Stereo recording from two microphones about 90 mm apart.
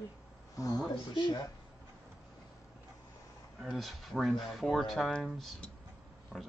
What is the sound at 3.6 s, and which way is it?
Speech, centre (ahead or behind).